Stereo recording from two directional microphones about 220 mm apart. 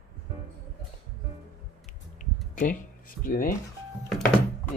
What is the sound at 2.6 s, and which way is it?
Speech, 40° left (ahead or behind).